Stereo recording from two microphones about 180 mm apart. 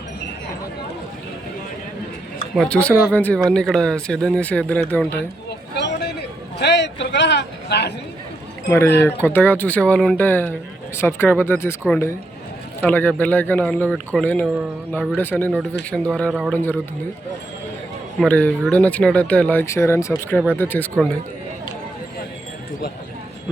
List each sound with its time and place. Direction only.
2.6 s speech: 5° left (ahead or behind)
5.7 s a sound: 70° left (ahead or behind)
8.7 s speech: 15° left (ahead or behind)
15.9 s speech: 5° right (ahead or behind)
16.5 s speech: 10° left (ahead or behind)
18.2 s speech: 10° left (ahead or behind)